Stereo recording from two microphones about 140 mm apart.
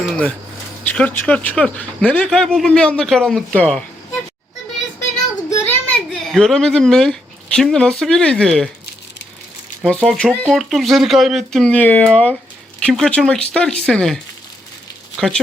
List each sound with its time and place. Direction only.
0.0 s a sound: 5° left (ahead or behind)
0.9 s speech: 10° left (ahead or behind)
5.5 s child singing: 20° left (ahead or behind)
6.1 s a woman's voice: centre (ahead or behind)
9.8 s speech: 5° left (ahead or behind)